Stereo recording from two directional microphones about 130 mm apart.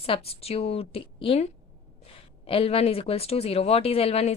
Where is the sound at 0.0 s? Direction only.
50° left (ahead or behind).